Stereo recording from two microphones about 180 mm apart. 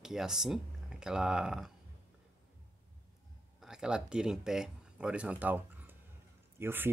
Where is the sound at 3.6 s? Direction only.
5° right (ahead or behind).